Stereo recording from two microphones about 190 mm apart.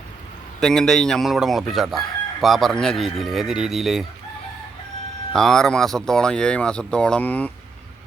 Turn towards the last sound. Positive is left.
turn(degrees=10)  # may be behind; listen again after turning